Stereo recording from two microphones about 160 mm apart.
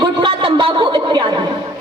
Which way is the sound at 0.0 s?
30° right (ahead or behind).